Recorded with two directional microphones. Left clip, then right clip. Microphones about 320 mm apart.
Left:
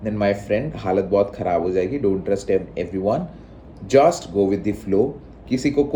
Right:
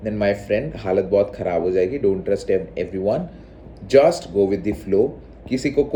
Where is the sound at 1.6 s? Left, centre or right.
Left.